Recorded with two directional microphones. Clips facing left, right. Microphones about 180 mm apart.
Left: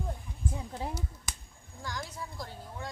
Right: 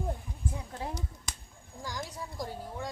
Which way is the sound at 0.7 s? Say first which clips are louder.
Left 1 dB; 5° left (ahead or behind).